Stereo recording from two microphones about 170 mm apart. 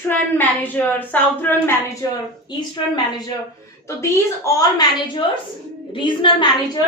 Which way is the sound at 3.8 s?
15° left (ahead or behind).